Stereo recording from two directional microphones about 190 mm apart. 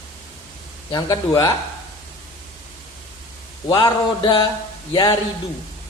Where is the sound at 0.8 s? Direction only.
20° left (ahead or behind).